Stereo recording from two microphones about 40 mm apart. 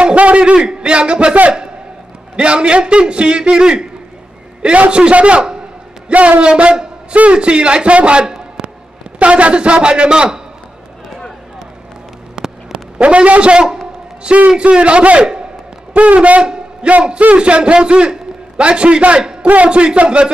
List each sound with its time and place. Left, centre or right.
0.0 s a man's voice: right
2.3 s a man's voice: right
12.4 s a sound: centre
13.0 s a man's voice: right
16.8 s a man's voice: right